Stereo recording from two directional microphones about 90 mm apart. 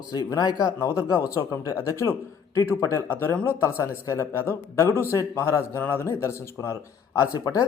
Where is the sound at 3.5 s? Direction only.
30° left (ahead or behind).